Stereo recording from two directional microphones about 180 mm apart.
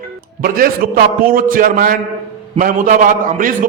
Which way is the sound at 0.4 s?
50° right (ahead or behind).